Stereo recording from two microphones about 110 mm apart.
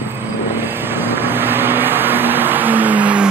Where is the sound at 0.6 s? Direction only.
20° right (ahead or behind).